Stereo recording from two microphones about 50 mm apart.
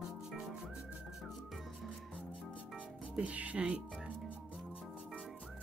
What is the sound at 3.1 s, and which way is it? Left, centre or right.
Speech, right.